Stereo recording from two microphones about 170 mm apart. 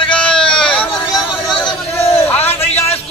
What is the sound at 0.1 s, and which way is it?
Sheep, 5° left (ahead or behind).